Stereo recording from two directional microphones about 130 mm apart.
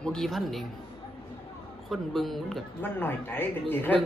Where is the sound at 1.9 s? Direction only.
Centre (ahead or behind).